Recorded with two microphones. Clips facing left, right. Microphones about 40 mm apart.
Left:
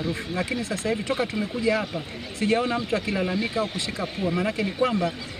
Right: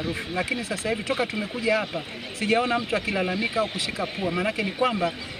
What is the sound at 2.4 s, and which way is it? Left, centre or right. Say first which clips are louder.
Speech: right 1 dB; right.